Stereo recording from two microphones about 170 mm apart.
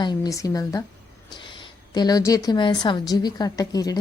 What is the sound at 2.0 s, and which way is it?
A woman's voice, 20° left (ahead or behind).